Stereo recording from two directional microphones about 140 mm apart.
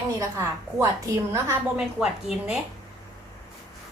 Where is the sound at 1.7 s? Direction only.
5° right (ahead or behind).